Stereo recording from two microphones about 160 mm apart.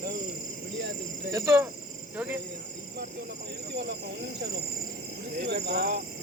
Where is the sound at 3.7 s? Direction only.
90° right.